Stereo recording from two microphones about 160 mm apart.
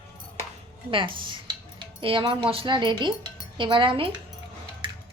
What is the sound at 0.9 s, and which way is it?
Speech, 30° right (ahead or behind).